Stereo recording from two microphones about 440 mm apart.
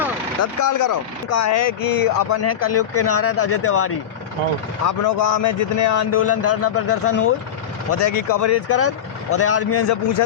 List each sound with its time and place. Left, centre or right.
0.6 s speech: left
2.4 s a man's voice: left
4.9 s a man's voice: left
7.9 s a man's voice: left